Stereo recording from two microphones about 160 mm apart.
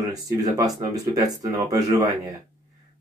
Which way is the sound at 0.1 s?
20° right (ahead or behind).